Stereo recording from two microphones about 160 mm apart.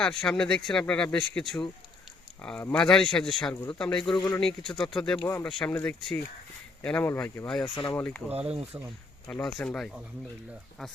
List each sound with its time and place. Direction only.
0.0 s speech: 5° left (ahead or behind)
3.5 s speech: 15° left (ahead or behind)
3.8 s speech: 5° left (ahead or behind)
5.2 s speech: 15° left (ahead or behind)
5.5 s speech: 5° left (ahead or behind)
7.6 s speech: 30° left (ahead or behind)
7.9 s speech: 10° left (ahead or behind)
8.3 s speech: 40° right (ahead or behind)
9.2 s speech: 5° left (ahead or behind)